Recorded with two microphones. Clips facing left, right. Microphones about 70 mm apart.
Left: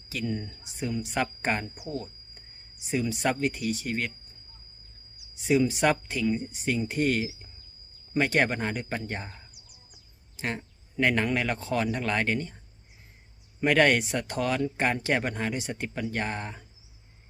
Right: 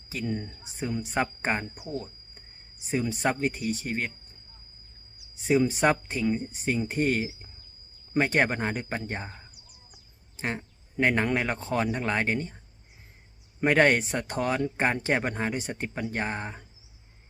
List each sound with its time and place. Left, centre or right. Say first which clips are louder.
0.1 s speech: even; right
1.9 s a sound: even; centre
2.8 s speech: even; right
5.4 s speech: even; right
9.2 s speech: right 2 dB; centre
10.3 s a sound: right 1 dB; right
11.0 s speech: right 1 dB; right
13.7 s speech: even; right
16.1 s speech: right 1 dB; right